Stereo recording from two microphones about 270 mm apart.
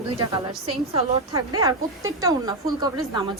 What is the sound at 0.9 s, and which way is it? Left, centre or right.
Speech, centre.